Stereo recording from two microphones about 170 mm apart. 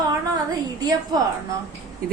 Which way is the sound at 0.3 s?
25° right (ahead or behind).